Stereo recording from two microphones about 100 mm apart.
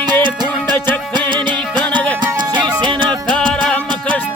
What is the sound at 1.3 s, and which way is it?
Music, 50° right (ahead or behind).